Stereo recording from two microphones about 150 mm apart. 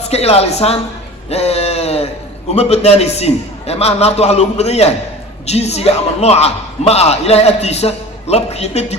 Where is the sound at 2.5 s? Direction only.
45° left (ahead or behind).